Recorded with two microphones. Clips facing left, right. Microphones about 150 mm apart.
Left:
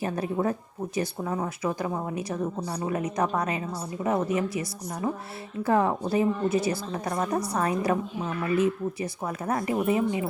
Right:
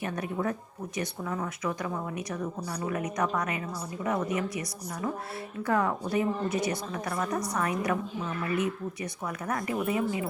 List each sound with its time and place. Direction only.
0.0 s a woman's voice: 30° left (ahead or behind)